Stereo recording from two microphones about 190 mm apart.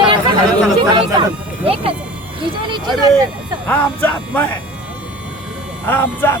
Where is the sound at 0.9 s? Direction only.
30° right (ahead or behind).